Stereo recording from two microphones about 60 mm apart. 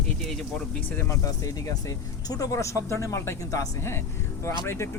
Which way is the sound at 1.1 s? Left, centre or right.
Left.